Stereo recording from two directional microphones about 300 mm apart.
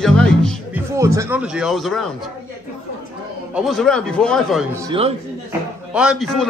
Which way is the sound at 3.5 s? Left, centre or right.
Centre.